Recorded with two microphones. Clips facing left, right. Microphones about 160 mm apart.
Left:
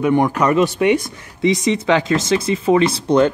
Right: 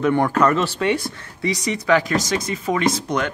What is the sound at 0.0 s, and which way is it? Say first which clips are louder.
Speech: left 2 dB; 15° left (ahead or behind).